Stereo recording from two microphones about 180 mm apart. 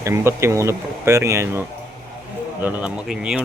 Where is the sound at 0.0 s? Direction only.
15° right (ahead or behind).